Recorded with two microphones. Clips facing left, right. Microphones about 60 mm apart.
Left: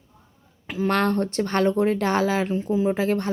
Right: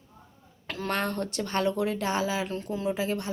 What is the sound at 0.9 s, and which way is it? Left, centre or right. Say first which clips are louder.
Speech: left 7 dB; left.